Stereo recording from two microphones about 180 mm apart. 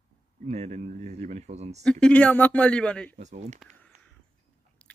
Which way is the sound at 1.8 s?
5° left (ahead or behind).